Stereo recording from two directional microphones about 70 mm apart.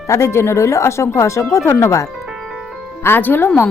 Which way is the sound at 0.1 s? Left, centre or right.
Left.